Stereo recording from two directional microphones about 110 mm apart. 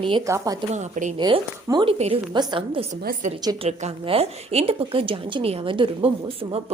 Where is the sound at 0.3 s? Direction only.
30° right (ahead or behind).